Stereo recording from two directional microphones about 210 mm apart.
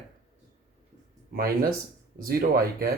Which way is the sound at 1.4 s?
45° right (ahead or behind).